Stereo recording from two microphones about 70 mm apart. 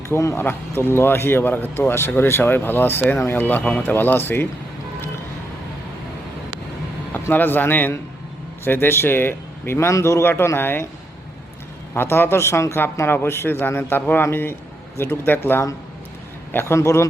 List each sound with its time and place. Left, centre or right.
0.1 s speech: left
7.1 s a man's voice: left
9.7 s a man's voice: left
11.9 s speech: left
12.8 s speech: left